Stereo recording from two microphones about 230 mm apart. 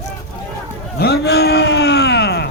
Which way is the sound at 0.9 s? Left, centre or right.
Left.